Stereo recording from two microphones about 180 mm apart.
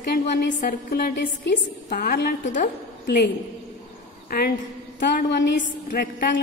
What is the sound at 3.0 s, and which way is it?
Speech, 65° left (ahead or behind).